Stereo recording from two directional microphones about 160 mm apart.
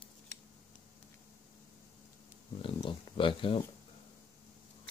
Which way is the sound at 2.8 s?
30° left (ahead or behind).